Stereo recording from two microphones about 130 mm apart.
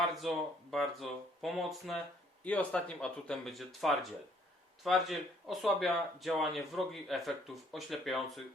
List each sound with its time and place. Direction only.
0.0 s speech: centre (ahead or behind)
2.4 s speech: 10° left (ahead or behind)